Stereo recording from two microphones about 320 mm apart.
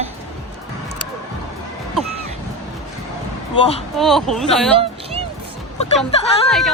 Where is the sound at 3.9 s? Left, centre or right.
Centre.